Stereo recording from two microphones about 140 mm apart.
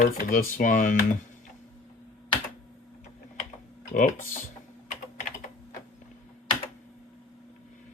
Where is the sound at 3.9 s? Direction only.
75° left (ahead or behind).